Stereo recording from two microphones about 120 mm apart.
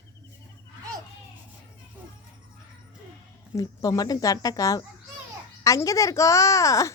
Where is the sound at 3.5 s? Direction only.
30° left (ahead or behind).